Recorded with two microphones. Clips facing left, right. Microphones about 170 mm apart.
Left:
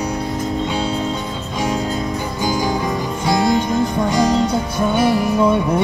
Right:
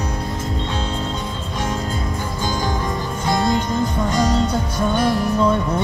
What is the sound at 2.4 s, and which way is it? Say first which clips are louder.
Music: left 4 dB; 10° left (ahead or behind).